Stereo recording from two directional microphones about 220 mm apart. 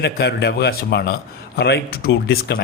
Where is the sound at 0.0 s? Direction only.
45° left (ahead or behind).